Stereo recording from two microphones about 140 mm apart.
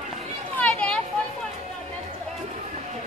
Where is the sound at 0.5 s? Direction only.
10° left (ahead or behind).